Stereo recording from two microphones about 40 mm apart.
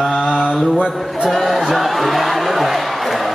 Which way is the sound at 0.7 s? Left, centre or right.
Right.